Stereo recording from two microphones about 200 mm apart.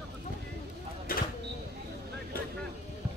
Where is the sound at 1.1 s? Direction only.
45° left (ahead or behind).